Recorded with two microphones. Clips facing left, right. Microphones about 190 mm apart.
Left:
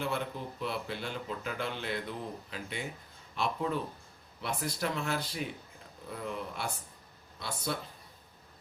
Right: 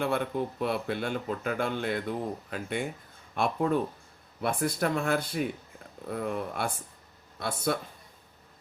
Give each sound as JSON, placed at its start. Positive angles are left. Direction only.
{"t": 0.0, "sound": "a man's voice", "side_deg": -55}